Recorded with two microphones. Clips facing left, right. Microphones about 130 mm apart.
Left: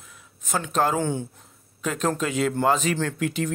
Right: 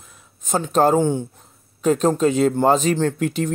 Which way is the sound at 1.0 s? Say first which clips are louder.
Right 6 dB; 15° right (ahead or behind).